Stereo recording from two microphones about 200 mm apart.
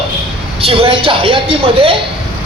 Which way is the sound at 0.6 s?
30° right (ahead or behind).